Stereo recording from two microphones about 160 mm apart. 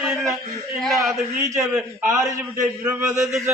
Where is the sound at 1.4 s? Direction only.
20° right (ahead or behind).